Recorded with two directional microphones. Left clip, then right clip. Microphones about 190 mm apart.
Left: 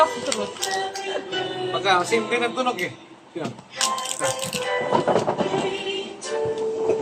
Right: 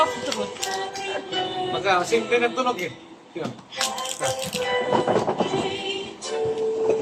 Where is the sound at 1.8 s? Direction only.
15° left (ahead or behind).